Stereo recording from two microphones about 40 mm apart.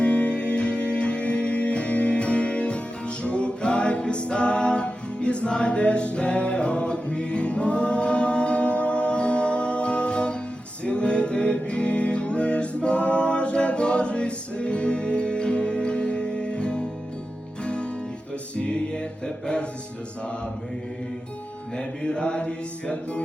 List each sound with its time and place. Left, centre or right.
0.0 s music: left
21.8 s music: left